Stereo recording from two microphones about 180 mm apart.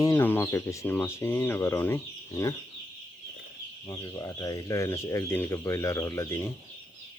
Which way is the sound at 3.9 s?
20° left (ahead or behind).